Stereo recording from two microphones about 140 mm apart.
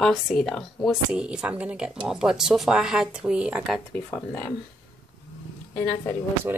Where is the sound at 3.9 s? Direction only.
15° left (ahead or behind).